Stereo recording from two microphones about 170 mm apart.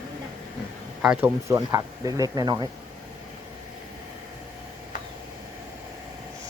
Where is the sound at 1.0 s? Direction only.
10° right (ahead or behind).